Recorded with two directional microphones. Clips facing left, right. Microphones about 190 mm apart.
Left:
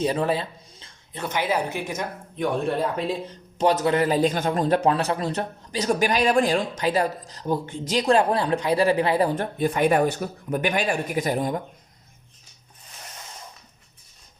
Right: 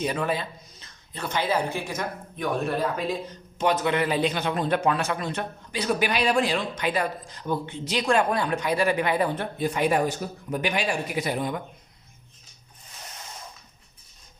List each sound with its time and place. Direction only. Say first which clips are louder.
0.0 s speech: left 4 dB; 30° left (ahead or behind)
3.6 s a man's voice: left 3 dB; 40° left (ahead or behind)